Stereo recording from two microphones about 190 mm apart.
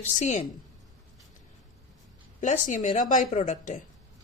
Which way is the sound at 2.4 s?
40° left (ahead or behind).